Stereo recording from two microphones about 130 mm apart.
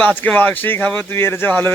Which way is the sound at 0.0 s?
15° left (ahead or behind).